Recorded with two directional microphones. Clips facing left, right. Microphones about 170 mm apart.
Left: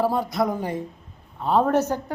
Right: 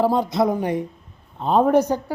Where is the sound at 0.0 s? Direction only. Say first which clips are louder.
Right 4 dB; 20° right (ahead or behind).